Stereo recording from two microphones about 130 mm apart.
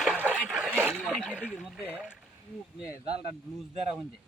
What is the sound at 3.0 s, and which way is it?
Speech, 50° right (ahead or behind).